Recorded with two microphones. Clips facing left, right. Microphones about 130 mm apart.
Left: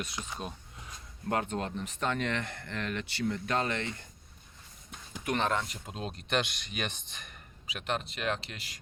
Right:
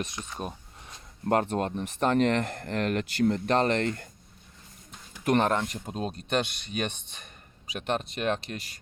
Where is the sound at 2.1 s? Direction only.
40° right (ahead or behind).